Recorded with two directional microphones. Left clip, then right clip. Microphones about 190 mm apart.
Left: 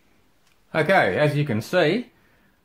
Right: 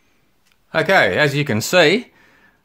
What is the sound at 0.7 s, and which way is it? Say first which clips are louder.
Speech: right 4 dB; 30° right (ahead or behind).